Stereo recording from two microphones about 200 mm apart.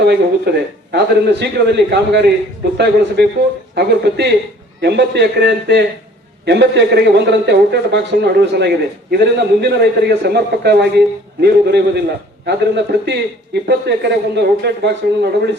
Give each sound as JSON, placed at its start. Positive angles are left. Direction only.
{"t": 0.0, "sound": "speech", "side_deg": -55}